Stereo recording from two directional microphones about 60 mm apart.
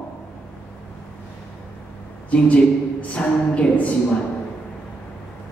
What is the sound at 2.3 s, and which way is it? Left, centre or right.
A woman's voice, left.